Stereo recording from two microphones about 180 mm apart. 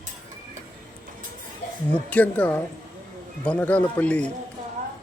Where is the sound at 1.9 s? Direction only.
10° left (ahead or behind).